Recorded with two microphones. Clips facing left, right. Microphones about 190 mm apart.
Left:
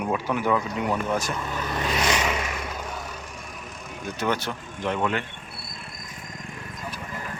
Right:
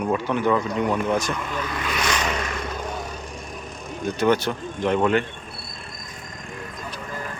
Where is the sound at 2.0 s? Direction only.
10° left (ahead or behind).